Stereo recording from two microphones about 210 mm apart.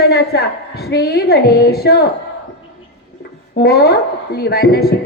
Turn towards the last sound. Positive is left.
turn(degrees=50)  # may be behind; listen again after turning